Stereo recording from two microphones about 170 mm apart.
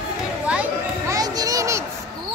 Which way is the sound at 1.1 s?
20° right (ahead or behind).